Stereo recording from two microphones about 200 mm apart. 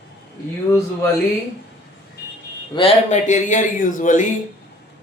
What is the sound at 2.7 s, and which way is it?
Speech, 30° left (ahead or behind).